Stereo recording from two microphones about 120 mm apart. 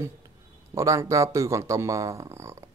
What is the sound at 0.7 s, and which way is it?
Speech, 25° right (ahead or behind).